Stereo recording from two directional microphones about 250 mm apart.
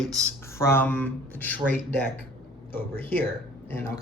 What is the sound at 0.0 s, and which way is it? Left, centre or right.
Speech, centre.